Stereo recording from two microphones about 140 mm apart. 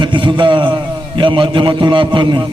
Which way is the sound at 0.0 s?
35° right (ahead or behind).